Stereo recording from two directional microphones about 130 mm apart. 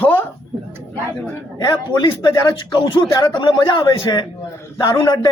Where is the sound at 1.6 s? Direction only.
35° left (ahead or behind).